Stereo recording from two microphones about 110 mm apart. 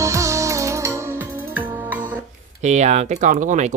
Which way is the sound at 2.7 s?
90° right.